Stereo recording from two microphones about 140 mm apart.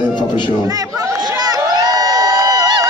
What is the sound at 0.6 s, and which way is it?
Crowd, 25° right (ahead or behind).